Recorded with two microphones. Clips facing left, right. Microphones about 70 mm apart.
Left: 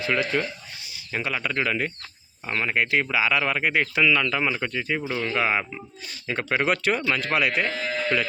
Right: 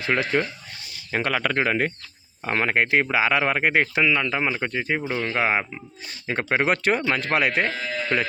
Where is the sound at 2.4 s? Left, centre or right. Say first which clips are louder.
Right 3 dB; right.